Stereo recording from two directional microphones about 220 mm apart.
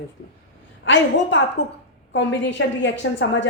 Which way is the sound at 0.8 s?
55° left (ahead or behind).